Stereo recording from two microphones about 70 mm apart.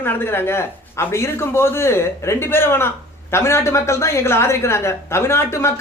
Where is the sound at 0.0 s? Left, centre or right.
Left.